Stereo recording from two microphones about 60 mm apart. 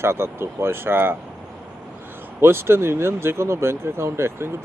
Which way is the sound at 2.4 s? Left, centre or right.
Right.